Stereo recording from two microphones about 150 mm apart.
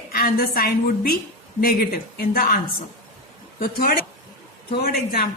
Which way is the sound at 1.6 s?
90° left.